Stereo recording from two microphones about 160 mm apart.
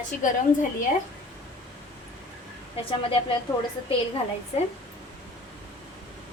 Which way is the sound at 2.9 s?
35° left (ahead or behind).